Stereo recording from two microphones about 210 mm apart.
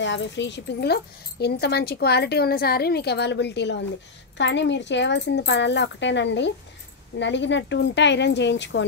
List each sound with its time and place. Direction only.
0.0 s speech: 60° left (ahead or behind)